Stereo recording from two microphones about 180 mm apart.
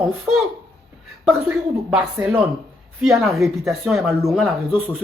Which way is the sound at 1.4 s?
10° right (ahead or behind).